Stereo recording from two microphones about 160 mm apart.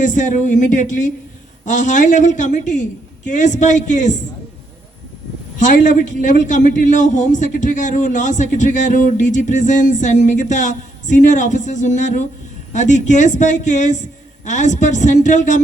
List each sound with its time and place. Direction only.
0.0 s a man's voice: 50° left (ahead or behind)
5.5 s a man's voice: 50° left (ahead or behind)